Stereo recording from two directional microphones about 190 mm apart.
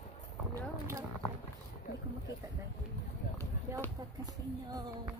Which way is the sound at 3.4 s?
10° left (ahead or behind).